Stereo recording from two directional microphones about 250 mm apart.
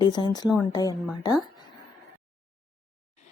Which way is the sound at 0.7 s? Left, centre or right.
Centre.